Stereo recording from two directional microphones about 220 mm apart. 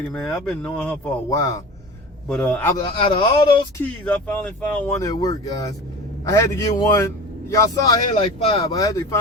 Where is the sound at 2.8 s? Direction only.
20° left (ahead or behind).